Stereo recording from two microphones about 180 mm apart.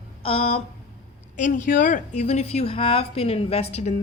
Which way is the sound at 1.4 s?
45° left (ahead or behind).